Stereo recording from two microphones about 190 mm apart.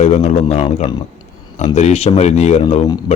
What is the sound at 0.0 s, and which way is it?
Speech, 35° left (ahead or behind).